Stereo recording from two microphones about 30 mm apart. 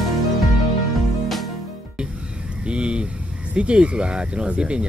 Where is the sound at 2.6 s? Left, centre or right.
Right.